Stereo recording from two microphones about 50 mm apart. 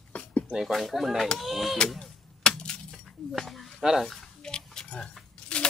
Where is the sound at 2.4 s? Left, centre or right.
Centre.